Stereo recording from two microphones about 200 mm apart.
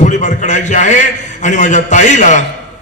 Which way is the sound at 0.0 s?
35° left (ahead or behind).